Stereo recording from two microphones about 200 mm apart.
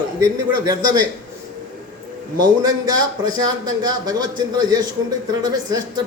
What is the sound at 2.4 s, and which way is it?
A man's voice, 20° right (ahead or behind).